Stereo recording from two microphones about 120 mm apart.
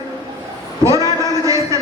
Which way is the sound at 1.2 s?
25° right (ahead or behind).